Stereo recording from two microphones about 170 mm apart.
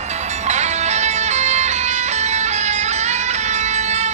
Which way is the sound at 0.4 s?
40° right (ahead or behind).